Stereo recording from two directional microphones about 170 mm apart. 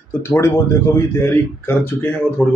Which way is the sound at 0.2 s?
15° left (ahead or behind).